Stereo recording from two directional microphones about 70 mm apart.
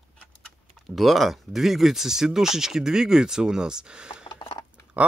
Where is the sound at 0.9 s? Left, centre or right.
Centre.